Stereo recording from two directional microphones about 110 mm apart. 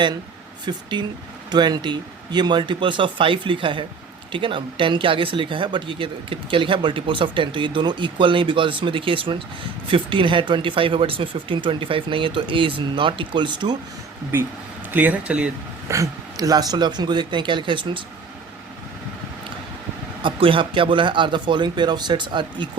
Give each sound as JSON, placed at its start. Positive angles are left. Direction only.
{"t": 0.6, "sound": "speech", "side_deg": -45}
{"t": 14.3, "sound": "speech", "side_deg": -20}
{"t": 15.9, "sound": "speech", "side_deg": -30}
{"t": 20.2, "sound": "speech", "side_deg": -50}